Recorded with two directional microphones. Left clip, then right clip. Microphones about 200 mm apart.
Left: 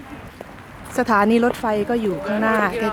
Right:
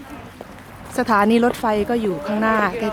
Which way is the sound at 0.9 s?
5° left (ahead or behind).